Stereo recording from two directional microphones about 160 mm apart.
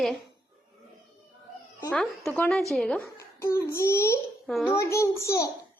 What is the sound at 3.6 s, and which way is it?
A child's voice, 15° left (ahead or behind).